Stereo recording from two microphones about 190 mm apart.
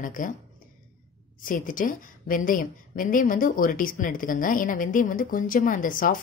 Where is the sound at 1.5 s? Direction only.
45° left (ahead or behind).